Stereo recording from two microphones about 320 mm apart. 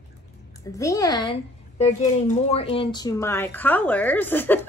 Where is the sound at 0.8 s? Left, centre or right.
Centre.